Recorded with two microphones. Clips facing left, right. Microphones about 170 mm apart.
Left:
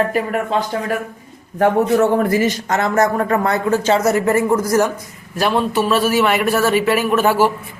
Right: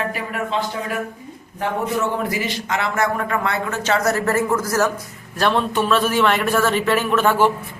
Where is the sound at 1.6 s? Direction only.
45° left (ahead or behind).